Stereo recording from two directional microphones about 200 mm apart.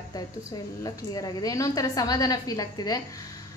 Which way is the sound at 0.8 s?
20° left (ahead or behind).